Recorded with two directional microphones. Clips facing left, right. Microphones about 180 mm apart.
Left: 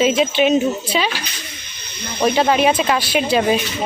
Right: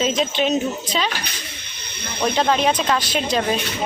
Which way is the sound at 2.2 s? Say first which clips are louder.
Left 4 dB; 10° left (ahead or behind).